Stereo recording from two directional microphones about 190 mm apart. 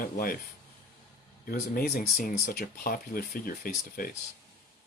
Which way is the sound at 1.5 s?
50° left (ahead or behind).